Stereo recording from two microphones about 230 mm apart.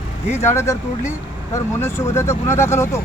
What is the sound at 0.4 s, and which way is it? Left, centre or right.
Speech, centre.